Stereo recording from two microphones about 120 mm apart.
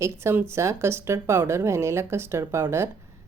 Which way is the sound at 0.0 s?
20° right (ahead or behind).